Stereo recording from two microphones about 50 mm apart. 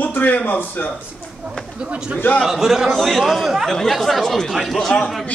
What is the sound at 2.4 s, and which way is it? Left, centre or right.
A man's voice, centre.